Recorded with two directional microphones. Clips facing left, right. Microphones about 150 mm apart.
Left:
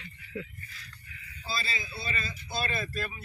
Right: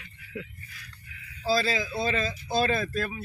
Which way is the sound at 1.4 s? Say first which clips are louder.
Right 11 dB; 90° right.